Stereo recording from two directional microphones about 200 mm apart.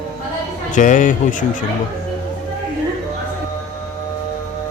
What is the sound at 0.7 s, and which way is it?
Speech, 40° left (ahead or behind).